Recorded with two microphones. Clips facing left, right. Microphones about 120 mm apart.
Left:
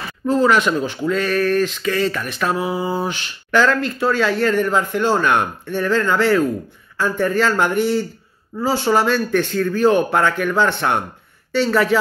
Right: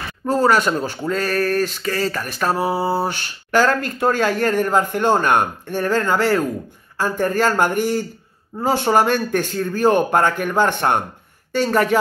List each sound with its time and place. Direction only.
0.3 s speech: 40° right (ahead or behind)